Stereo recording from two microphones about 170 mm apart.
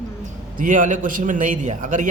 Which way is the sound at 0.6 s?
50° right (ahead or behind).